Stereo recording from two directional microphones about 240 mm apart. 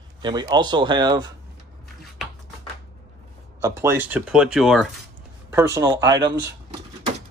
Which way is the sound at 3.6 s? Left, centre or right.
Centre.